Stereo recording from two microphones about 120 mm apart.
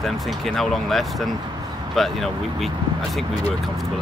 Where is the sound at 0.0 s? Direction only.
Centre (ahead or behind).